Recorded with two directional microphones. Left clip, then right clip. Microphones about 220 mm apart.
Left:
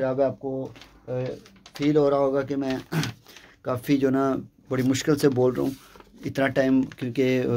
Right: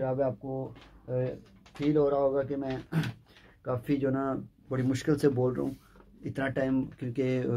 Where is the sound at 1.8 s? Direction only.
50° left (ahead or behind).